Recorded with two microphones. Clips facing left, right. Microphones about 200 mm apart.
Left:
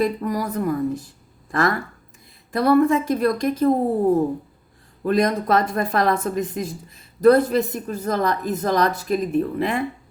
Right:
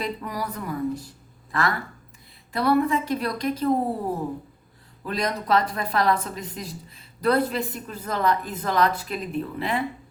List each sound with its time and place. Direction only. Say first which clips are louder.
0.0 s a woman's voice: left 8 dB; 45° left (ahead or behind)
5.0 s a woman's voice: left 7 dB; 50° left (ahead or behind)